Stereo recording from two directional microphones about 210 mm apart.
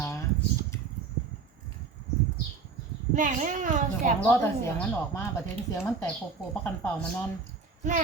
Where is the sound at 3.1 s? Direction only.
35° right (ahead or behind).